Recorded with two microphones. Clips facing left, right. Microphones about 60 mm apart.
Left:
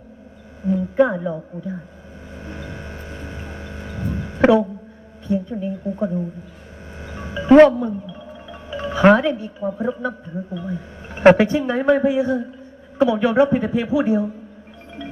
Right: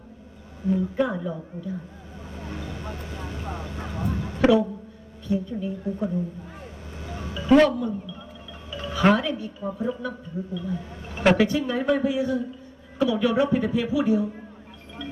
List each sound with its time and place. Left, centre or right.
0.9 s speech: left
2.5 s vehicle: left
3.9 s a sound: left
5.3 s speech: left
7.0 s music: left
8.4 s speech: left